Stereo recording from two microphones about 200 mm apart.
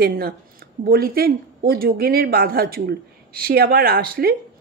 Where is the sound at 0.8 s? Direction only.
50° right (ahead or behind).